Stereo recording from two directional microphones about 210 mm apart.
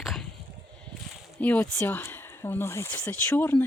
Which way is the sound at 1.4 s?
10° left (ahead or behind).